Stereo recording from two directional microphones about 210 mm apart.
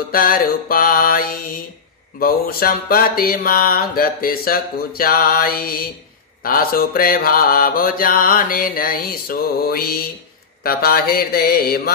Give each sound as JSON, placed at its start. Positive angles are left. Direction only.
{"t": 0.1, "sound": "mantra", "side_deg": 45}